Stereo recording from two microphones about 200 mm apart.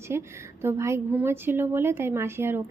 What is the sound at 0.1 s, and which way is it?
A woman's voice, 15° right (ahead or behind).